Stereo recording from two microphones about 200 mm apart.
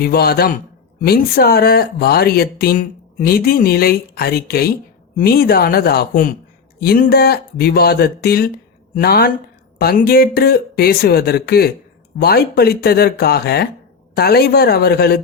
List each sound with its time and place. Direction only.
0.0 s speech: 50° left (ahead or behind)